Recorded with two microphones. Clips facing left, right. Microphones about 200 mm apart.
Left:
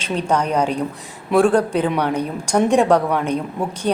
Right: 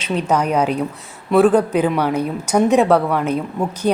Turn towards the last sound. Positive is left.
turn(degrees=-5)  # may be behind; listen again after turning